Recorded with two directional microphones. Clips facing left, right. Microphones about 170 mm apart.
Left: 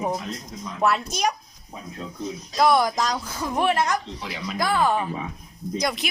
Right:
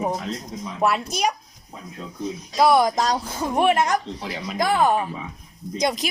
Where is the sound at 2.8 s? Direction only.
30° right (ahead or behind).